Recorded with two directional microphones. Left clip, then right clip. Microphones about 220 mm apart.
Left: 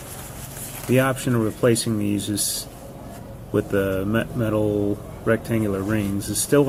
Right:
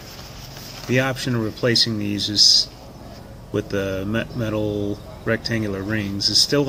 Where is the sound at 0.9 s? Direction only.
Centre (ahead or behind).